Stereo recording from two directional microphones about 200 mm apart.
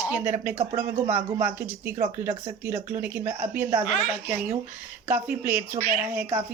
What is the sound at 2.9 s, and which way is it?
Speech, 10° right (ahead or behind).